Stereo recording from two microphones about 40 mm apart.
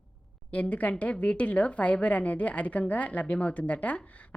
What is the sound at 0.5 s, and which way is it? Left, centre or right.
A woman's voice, left.